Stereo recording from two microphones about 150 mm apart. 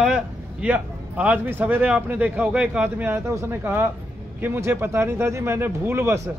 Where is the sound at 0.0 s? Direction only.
5° right (ahead or behind).